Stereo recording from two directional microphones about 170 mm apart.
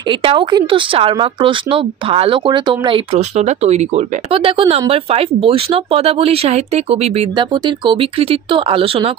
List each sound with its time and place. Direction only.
0.1 s speech: 30° right (ahead or behind)